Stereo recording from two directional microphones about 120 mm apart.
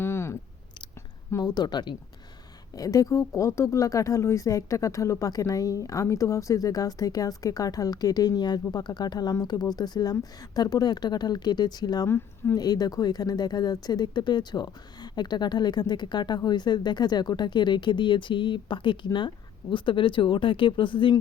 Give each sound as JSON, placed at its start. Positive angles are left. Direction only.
{"t": 0.0, "sound": "a sound", "side_deg": 20}
{"t": 1.3, "sound": "speech", "side_deg": 35}
{"t": 12.0, "sound": "speech", "side_deg": 20}
{"t": 12.5, "sound": "speech", "side_deg": 35}